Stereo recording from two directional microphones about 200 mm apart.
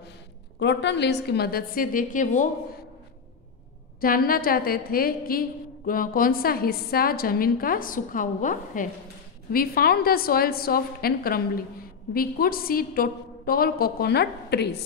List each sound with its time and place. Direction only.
0.6 s a woman's voice: 60° left (ahead or behind); by 2.5 s 40° left (ahead or behind)
4.0 s a woman's voice: 45° left (ahead or behind)